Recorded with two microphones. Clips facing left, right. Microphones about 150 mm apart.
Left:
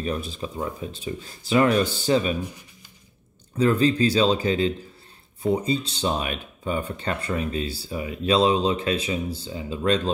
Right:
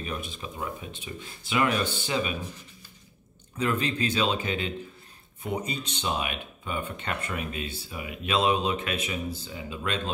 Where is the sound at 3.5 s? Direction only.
35° left (ahead or behind).